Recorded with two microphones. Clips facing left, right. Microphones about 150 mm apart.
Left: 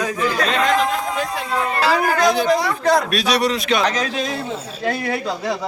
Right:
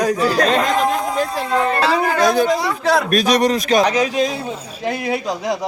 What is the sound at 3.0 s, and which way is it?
Speech, 45° right (ahead or behind).